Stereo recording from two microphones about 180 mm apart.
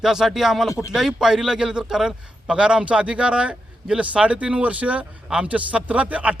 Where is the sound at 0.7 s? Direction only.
15° left (ahead or behind).